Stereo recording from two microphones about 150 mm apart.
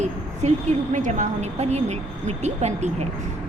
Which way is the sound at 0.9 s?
60° right (ahead or behind).